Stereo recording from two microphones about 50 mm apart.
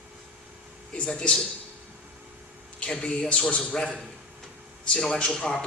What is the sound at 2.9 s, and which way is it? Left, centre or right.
Speech, centre.